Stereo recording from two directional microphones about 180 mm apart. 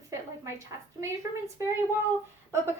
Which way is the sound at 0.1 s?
15° right (ahead or behind).